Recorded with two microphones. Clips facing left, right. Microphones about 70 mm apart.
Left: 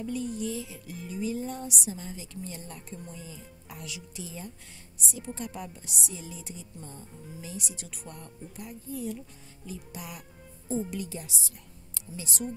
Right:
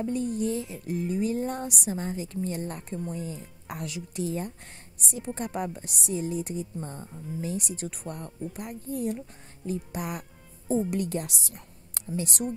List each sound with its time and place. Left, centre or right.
0.0 s speech: right